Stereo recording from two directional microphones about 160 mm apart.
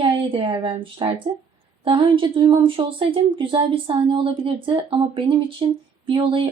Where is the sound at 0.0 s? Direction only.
30° right (ahead or behind).